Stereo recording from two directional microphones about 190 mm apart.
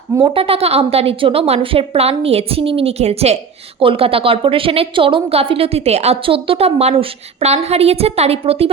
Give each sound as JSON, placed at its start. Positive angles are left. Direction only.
{"t": 0.2, "sound": "a woman's voice", "side_deg": -25}